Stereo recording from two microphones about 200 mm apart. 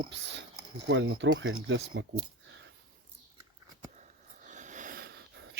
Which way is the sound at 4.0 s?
40° right (ahead or behind).